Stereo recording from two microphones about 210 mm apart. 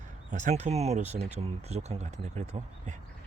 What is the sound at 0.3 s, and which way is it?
Speech, 35° right (ahead or behind).